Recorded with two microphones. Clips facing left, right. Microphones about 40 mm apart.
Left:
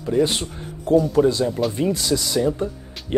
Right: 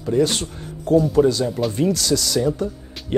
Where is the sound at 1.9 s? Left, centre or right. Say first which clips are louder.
Right 1 dB; centre.